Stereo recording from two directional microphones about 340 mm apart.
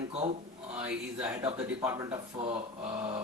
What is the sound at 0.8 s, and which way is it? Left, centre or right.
A man's voice, centre.